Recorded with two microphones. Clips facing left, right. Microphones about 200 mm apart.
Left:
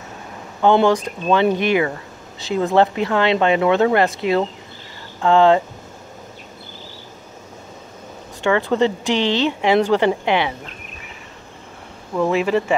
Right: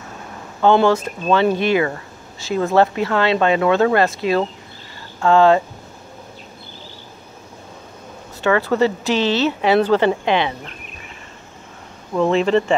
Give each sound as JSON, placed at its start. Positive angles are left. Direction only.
{"t": 0.6, "sound": "speech", "side_deg": 15}
{"t": 8.4, "sound": "speech", "side_deg": 15}
{"t": 12.2, "sound": "speech", "side_deg": 10}